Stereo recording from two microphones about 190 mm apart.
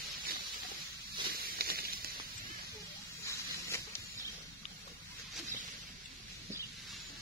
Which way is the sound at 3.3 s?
15° left (ahead or behind).